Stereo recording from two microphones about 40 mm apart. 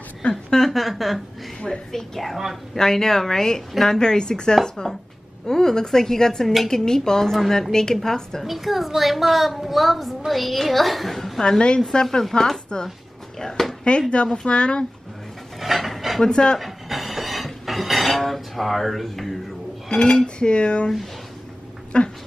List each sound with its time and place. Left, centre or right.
0.2 s speech: centre
0.7 s a woman's voice: centre
3.9 s dishes: centre
5.5 s a woman's voice: centre
8.5 s a woman's voice: centre
11.4 s dishes: left
11.9 s a woman's voice: centre
13.6 s a sound: centre
14.1 s dishes: left
15.6 s dishes: centre
16.2 s dishes: left
16.5 s dishes: centre
19.9 s dishes: centre
21.9 s dishes: left